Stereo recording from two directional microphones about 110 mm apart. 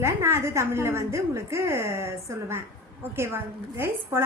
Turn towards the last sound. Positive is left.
turn(degrees=-20)  # may be behind; listen again after turning